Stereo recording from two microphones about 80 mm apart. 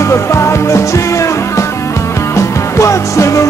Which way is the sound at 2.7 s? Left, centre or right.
Left.